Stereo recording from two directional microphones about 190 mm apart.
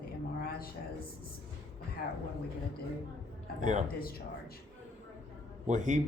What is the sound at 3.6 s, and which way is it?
Speech, 40° right (ahead or behind).